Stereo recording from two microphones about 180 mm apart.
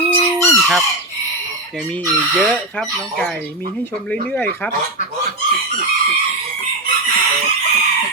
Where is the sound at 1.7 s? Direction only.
5° left (ahead or behind).